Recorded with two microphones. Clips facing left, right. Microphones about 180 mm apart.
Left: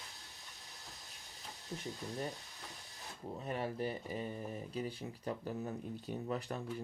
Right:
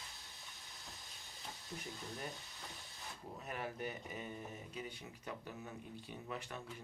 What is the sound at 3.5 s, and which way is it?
Speech, 30° left (ahead or behind).